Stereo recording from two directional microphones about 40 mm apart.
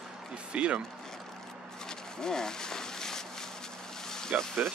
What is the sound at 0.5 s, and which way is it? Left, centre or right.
Speech, right.